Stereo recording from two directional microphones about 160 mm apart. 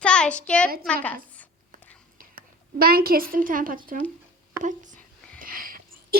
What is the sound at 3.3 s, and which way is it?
A woman's voice, 60° right (ahead or behind).